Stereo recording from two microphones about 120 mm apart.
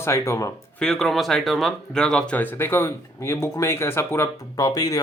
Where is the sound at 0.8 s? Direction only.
5° left (ahead or behind); by 4.9 s 30° left (ahead or behind).